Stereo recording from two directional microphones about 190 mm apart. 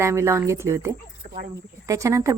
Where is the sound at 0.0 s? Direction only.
15° right (ahead or behind).